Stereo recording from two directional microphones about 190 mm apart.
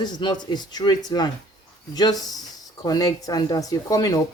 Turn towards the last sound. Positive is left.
turn(degrees=15)  # may be behind; listen again after turning